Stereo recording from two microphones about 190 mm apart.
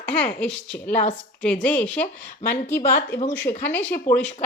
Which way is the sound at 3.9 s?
40° left (ahead or behind).